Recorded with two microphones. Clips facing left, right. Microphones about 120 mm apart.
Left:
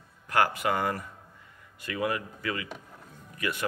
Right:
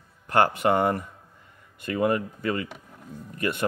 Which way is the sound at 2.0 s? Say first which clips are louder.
Right 6 dB; 35° right (ahead or behind).